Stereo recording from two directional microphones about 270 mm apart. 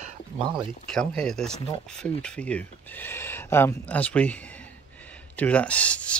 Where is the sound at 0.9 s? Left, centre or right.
Centre.